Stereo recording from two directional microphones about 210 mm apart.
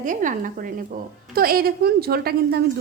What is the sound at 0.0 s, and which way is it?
A woman's voice, 40° right (ahead or behind).